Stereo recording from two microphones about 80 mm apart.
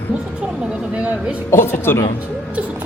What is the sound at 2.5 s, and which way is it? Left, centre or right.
Speech, centre.